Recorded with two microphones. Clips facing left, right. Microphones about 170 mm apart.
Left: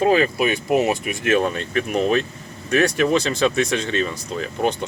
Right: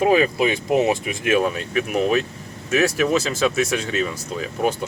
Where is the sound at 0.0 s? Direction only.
15° right (ahead or behind).